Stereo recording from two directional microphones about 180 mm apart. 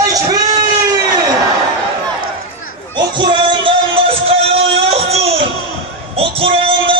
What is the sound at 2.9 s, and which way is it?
Music, 25° right (ahead or behind).